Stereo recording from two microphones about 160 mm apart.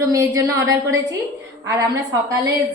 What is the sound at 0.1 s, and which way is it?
Speech, 20° right (ahead or behind).